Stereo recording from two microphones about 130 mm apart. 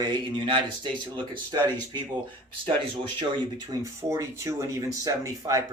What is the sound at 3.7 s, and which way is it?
Speech, 25° right (ahead or behind).